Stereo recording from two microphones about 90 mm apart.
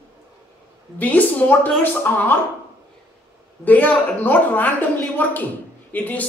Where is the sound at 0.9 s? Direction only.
20° left (ahead or behind).